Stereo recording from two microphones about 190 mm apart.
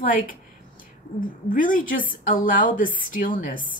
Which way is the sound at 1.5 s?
45° left (ahead or behind).